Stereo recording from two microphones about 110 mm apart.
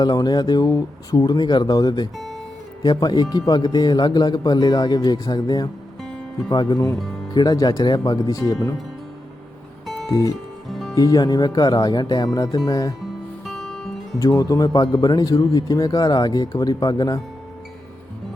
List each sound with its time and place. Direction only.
0.0 s speech: 40° left (ahead or behind)
2.1 s music: centre (ahead or behind)
2.8 s speech: 40° left (ahead or behind)
9.8 s music: centre (ahead or behind)
10.1 s speech: 35° left (ahead or behind)
10.7 s music: centre (ahead or behind)
10.9 s speech: 35° left (ahead or behind)
13.4 s music: 5° left (ahead or behind)
14.2 s speech: 30° left (ahead or behind)